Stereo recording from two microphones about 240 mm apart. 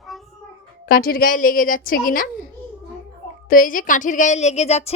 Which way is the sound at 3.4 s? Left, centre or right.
Left.